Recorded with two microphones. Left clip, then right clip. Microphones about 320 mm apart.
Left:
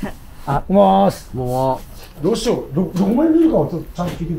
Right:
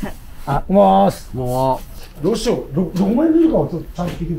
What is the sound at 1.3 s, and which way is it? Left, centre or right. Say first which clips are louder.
Speech: right 1 dB; right.